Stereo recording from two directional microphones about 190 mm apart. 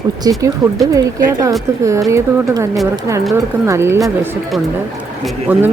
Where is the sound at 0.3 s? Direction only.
15° right (ahead or behind).